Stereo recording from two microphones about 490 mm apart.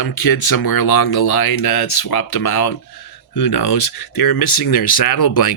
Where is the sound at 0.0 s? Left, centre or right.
Left.